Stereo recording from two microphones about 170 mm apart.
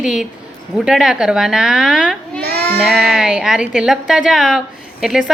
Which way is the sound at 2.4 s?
70° right (ahead or behind).